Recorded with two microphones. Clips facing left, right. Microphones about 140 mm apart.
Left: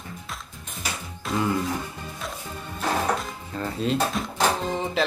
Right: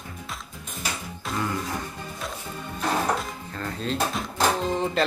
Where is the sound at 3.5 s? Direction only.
10° left (ahead or behind).